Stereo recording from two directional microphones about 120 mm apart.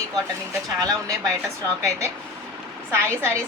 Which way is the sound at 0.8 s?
30° right (ahead or behind).